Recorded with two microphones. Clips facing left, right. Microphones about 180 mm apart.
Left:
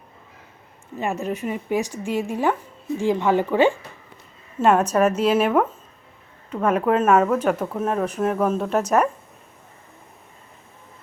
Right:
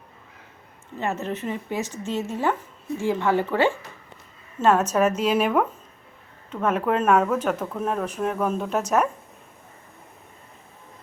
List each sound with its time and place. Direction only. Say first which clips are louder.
0.9 s speech: left 2 dB; 10° left (ahead or behind)